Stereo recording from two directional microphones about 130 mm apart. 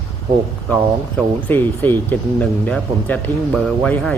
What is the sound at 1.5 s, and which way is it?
A man's voice, 15° left (ahead or behind).